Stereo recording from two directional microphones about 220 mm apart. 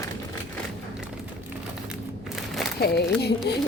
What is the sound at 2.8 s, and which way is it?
Carnatic music, 45° left (ahead or behind).